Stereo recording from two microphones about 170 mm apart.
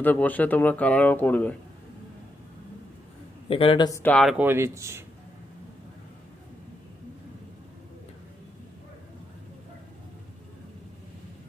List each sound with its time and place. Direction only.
0.0 s speech: 10° left (ahead or behind)
3.4 s a man's voice: 35° left (ahead or behind)
4.0 s speech: 5° left (ahead or behind)
4.4 s speech: 15° right (ahead or behind)